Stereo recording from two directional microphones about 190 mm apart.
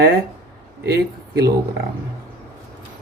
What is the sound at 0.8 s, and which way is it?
Speech, 60° right (ahead or behind).